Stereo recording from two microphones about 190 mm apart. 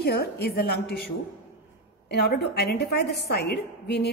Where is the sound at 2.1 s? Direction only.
60° left (ahead or behind).